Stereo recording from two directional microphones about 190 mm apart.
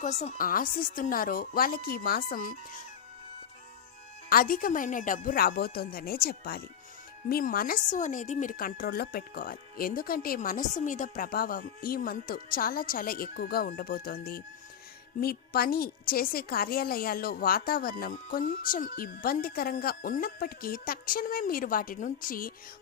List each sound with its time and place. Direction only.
0.0 s a woman's voice: 40° left (ahead or behind)
4.3 s a woman's voice: 50° left (ahead or behind)